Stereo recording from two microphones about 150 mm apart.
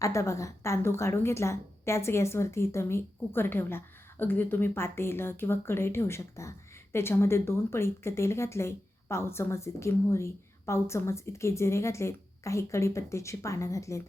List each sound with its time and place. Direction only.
0.0 s a woman's voice: 20° left (ahead or behind)